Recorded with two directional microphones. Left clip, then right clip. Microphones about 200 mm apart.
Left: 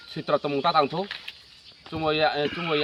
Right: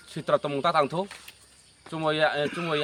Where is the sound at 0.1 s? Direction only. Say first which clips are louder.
Even; 15° right (ahead or behind).